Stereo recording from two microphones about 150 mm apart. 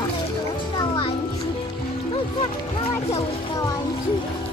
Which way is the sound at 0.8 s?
35° left (ahead or behind).